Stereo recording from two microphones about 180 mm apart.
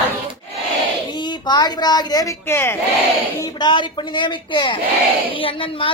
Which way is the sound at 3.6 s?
25° left (ahead or behind).